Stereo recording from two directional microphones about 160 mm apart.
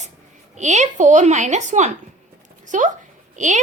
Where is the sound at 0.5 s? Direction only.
50° right (ahead or behind).